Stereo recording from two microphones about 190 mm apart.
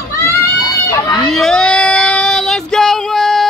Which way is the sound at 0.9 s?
20° left (ahead or behind).